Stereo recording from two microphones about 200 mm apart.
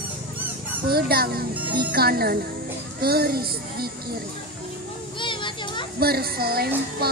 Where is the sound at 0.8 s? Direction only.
50° right (ahead or behind).